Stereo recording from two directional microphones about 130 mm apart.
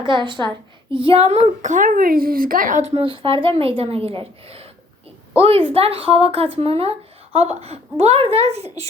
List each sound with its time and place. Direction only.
0.1 s a woman's voice: 35° right (ahead or behind); by 2.9 s 80° right
2.9 s speech: 45° right (ahead or behind)